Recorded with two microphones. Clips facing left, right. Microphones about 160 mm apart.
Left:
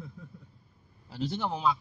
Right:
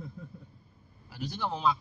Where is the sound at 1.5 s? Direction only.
10° left (ahead or behind).